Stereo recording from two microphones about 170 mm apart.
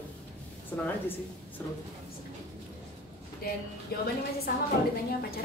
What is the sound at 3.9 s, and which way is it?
Speech, 65° left (ahead or behind).